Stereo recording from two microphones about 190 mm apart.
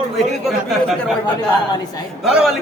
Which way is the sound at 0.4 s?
Centre (ahead or behind).